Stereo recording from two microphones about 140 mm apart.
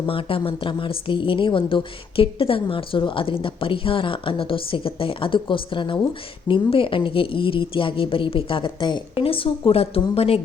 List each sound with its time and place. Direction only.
0.0 s a woman's voice: 40° left (ahead or behind)